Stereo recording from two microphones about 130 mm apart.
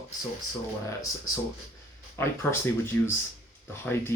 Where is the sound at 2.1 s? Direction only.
20° left (ahead or behind).